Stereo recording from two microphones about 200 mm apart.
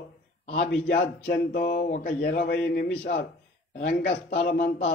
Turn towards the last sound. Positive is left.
turn(degrees=45)  # may be behind; listen again after turning